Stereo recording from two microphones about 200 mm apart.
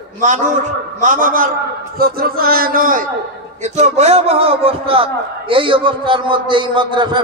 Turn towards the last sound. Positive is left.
turn(degrees=-25)  # may be behind; listen again after turning